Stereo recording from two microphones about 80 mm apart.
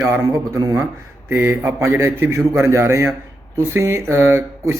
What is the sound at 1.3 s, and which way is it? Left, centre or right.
A man's voice, right.